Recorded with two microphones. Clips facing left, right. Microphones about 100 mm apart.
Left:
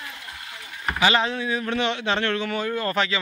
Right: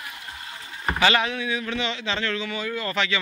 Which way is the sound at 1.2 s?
35° left (ahead or behind).